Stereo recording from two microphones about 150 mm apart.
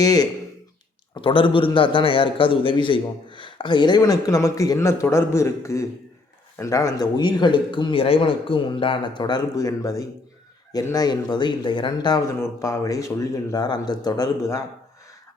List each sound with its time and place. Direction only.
0.0 s a man's voice: 25° left (ahead or behind)